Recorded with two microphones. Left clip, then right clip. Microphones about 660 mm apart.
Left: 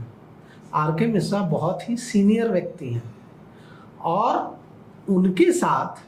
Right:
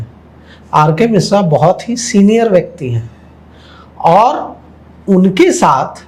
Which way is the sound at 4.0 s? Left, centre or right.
Right.